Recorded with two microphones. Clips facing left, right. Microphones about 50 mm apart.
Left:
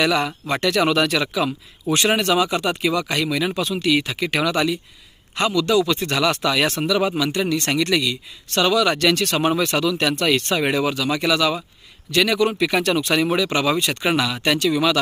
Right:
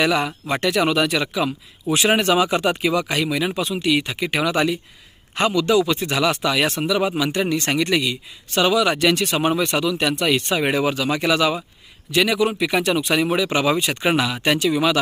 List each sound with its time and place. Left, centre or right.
0.0 s speech: centre
2.1 s speech: right
5.3 s speech: right; by 7.2 s centre
7.2 s speech: centre